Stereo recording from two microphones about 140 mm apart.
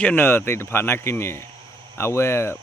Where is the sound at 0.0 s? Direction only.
10° left (ahead or behind).